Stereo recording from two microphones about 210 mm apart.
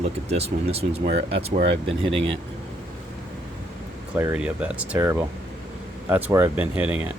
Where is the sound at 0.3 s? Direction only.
30° right (ahead or behind).